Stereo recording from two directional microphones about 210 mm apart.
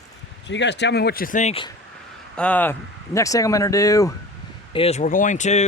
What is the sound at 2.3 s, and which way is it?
Speech, 5° left (ahead or behind).